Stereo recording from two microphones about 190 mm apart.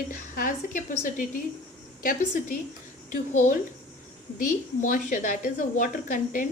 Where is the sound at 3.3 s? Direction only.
40° left (ahead or behind).